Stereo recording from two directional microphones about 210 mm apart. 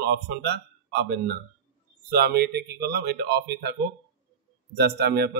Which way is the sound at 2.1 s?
50° right (ahead or behind).